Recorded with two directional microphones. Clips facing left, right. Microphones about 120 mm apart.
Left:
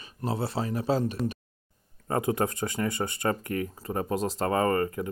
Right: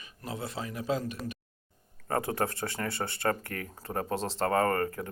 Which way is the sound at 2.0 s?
20° left (ahead or behind).